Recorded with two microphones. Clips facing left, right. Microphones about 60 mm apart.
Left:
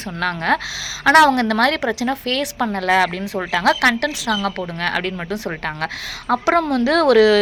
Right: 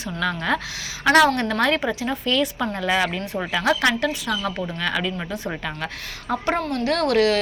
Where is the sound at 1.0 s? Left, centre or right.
Left.